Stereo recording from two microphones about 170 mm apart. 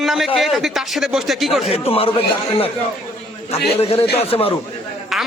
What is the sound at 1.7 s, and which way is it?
Speech, 35° left (ahead or behind).